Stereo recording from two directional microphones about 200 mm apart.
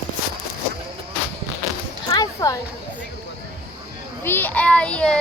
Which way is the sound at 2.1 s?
15° left (ahead or behind).